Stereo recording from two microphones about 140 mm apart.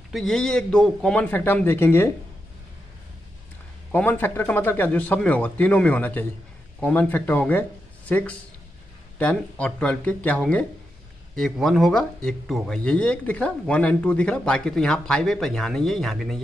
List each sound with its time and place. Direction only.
0.1 s speech: 5° left (ahead or behind)
3.9 s speech: 10° left (ahead or behind)